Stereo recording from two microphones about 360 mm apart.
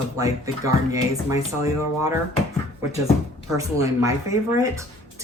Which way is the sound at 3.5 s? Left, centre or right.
Centre.